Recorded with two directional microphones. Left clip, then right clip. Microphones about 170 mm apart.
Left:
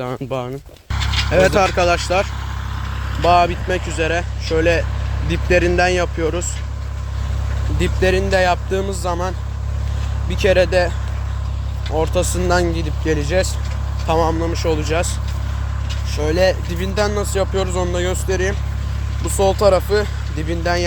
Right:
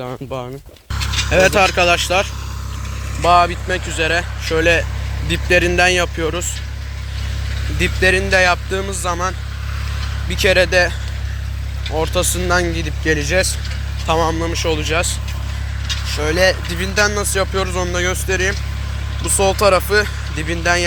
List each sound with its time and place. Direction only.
0.0 s speech: 25° left (ahead or behind)
1.1 s a sound: centre (ahead or behind)
1.5 s speech: 10° left (ahead or behind)
3.2 s speech: 25° left (ahead or behind); by 6.4 s 5° left (ahead or behind)
7.8 s speech: 15° left (ahead or behind)